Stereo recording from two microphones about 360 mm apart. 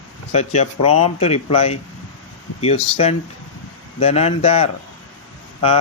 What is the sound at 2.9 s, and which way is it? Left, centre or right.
Speech, centre.